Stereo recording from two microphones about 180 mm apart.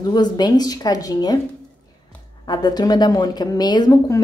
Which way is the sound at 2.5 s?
25° left (ahead or behind).